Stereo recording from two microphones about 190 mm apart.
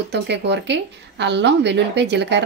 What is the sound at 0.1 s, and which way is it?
A woman's voice, 65° right (ahead or behind).